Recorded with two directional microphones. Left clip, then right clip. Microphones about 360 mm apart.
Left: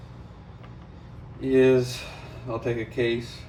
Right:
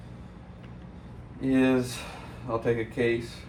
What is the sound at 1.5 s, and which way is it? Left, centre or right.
Speech, centre.